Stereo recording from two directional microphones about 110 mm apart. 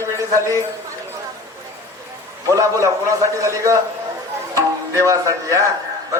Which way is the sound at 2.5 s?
30° right (ahead or behind).